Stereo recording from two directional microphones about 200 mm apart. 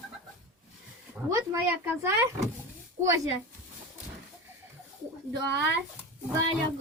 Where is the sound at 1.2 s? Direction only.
15° right (ahead or behind).